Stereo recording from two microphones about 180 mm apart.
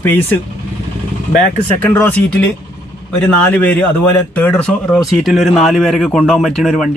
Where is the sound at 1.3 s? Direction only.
65° left (ahead or behind).